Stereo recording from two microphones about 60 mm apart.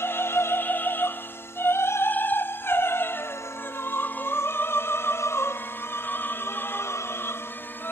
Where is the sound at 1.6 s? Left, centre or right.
Left.